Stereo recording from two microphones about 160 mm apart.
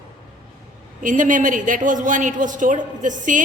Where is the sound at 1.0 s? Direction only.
55° right (ahead or behind).